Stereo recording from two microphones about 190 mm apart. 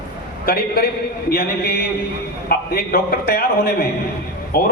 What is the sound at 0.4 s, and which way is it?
A man's voice, 50° left (ahead or behind).